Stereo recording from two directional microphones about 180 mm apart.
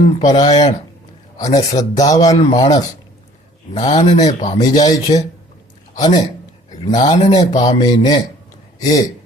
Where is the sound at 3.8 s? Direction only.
30° left (ahead or behind).